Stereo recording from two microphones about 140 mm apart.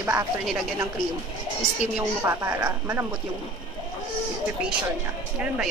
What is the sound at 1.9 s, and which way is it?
Speech, 15° right (ahead or behind).